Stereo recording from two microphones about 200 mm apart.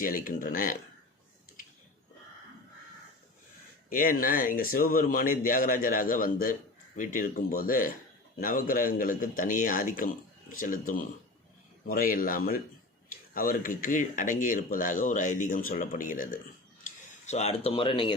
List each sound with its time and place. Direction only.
0.0 s speech: 45° left (ahead or behind)
3.8 s speech: 45° left (ahead or behind); by 18.2 s 25° left (ahead or behind)